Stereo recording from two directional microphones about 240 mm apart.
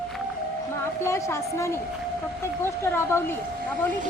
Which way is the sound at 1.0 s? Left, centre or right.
Centre.